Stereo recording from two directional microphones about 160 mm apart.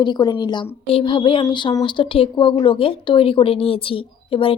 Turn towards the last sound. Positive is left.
turn(degrees=35)  # may be behind; listen again after turning